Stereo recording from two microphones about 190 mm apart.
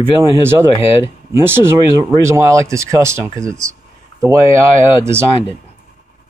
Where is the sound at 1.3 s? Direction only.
10° right (ahead or behind).